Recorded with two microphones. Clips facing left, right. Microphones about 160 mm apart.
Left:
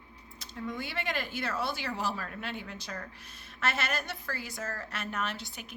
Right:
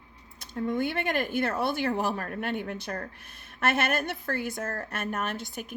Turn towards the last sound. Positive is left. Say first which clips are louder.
# right 4 dB
turn(degrees=-50)  # may be behind; listen again after turning